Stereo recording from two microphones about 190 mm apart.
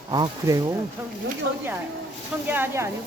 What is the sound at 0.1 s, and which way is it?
Speech, 20° right (ahead or behind).